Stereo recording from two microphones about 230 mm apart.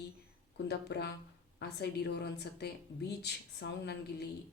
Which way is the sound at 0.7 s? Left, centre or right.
Left.